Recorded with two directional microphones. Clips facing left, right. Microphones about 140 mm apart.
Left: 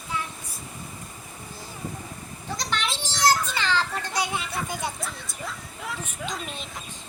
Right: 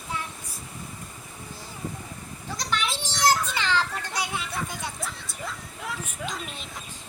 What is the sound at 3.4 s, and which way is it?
Speech, 15° right (ahead or behind).